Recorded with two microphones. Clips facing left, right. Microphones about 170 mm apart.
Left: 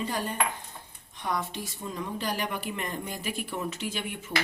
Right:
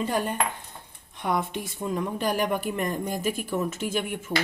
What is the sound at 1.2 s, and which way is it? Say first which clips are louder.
Speech: right 5 dB; 55° right (ahead or behind).